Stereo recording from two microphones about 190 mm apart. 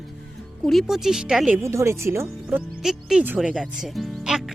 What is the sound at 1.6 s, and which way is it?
Speech, 15° right (ahead or behind).